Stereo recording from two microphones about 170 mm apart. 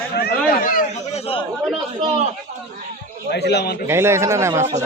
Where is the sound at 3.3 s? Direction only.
80° left.